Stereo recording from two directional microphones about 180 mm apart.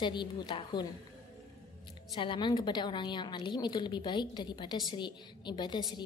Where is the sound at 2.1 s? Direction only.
25° left (ahead or behind).